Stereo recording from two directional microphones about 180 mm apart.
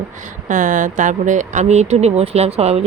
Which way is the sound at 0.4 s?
50° right (ahead or behind).